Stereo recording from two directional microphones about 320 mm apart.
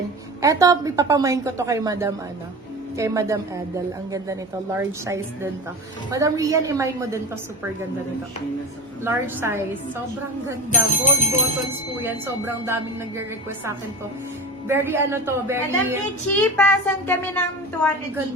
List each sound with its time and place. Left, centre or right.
0.4 s a woman's voice: centre
4.8 s a woman's voice: centre
9.0 s a woman's voice: centre
10.7 s speech: left
12.0 s a woman's voice: centre
14.7 s a woman's voice: centre
16.3 s child singing: centre